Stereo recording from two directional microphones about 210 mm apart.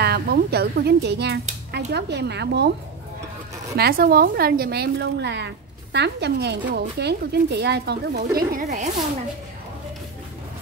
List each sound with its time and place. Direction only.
0.0 s speech: 50° right (ahead or behind)
3.7 s speech: 50° right (ahead or behind)
8.4 s speech: 35° right (ahead or behind)